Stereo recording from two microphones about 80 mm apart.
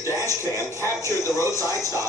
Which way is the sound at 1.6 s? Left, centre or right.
Right.